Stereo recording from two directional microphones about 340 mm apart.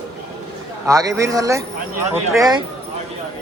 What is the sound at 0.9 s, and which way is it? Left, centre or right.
Speech, centre.